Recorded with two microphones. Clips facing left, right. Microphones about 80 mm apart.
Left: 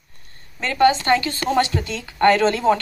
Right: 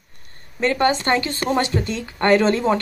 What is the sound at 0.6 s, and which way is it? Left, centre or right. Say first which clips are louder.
Speech: left 2 dB; right.